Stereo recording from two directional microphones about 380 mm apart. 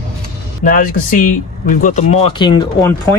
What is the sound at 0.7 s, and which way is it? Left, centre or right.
Speech, left.